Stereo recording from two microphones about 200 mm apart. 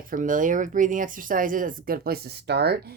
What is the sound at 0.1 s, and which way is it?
Speech, 40° right (ahead or behind).